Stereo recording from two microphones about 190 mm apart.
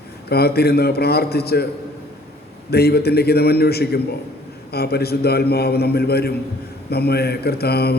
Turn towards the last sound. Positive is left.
turn(degrees=55)  # may be behind; listen again after turning